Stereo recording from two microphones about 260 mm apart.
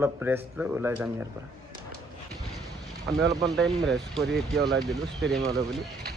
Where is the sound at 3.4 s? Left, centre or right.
Centre.